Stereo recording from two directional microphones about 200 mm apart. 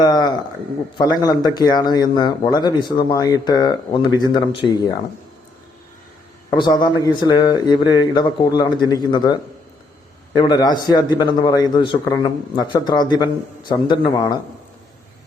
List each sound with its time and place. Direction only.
0.0 s speech: 20° left (ahead or behind)
6.5 s speech: 25° left (ahead or behind)